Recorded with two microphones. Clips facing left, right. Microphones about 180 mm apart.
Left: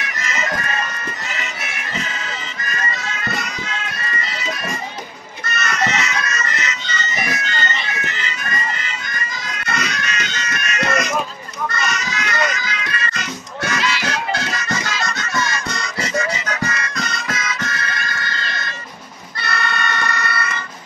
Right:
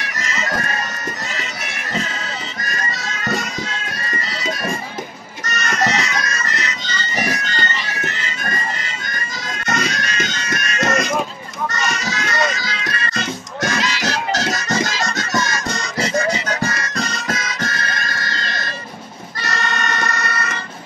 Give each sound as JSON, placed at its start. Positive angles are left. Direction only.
{"t": 5.4, "sound": "bagpipes", "side_deg": -40}
{"t": 8.4, "sound": "music", "side_deg": -40}